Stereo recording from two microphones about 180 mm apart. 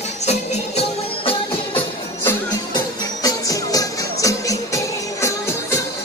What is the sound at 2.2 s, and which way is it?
Music, 15° left (ahead or behind).